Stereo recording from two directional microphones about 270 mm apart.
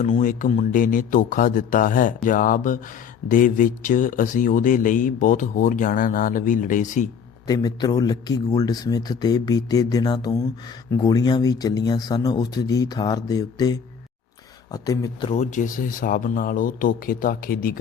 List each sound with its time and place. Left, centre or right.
0.0 s speech: left
7.4 s speech: centre; by 17.7 s left